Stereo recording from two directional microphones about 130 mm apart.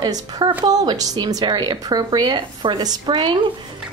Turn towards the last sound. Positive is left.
turn(degrees=-35)  # may be behind; listen again after turning